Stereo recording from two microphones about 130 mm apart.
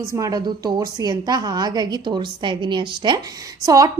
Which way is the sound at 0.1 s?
25° right (ahead or behind).